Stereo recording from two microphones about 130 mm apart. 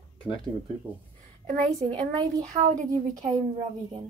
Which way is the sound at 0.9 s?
15° right (ahead or behind).